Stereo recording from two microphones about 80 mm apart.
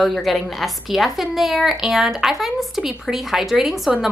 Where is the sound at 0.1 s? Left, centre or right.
Centre.